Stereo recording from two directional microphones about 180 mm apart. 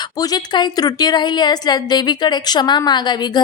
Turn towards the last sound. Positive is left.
turn(degrees=25)  # may be behind; listen again after turning